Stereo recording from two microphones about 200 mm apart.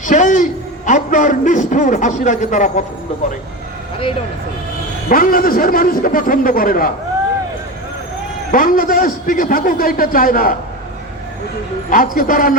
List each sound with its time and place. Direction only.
0.0 s a sound: 40° left (ahead or behind)
0.9 s speech: 40° left (ahead or behind)
5.0 s a man's voice: 45° left (ahead or behind)
8.5 s a man's voice: 45° left (ahead or behind)
11.9 s a man's voice: 45° left (ahead or behind)